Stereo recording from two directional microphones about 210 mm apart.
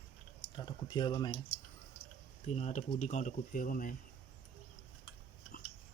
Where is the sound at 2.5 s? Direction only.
30° left (ahead or behind).